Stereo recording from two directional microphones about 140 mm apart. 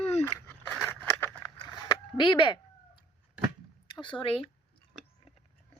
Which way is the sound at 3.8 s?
35° left (ahead or behind).